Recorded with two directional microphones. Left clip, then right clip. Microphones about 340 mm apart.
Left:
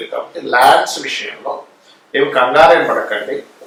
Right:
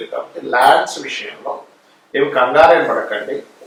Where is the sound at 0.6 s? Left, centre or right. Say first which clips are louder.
Left 2 dB; centre.